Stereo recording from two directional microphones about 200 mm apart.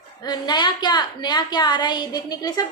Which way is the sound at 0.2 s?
20° left (ahead or behind).